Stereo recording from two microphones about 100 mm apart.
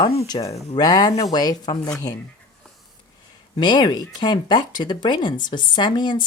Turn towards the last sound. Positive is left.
turn(degrees=50)  # may be behind; listen again after turning